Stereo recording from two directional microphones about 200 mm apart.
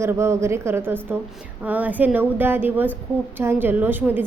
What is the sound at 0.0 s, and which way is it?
A woman's voice, 15° right (ahead or behind).